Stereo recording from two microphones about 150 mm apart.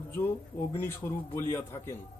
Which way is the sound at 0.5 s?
70° left (ahead or behind).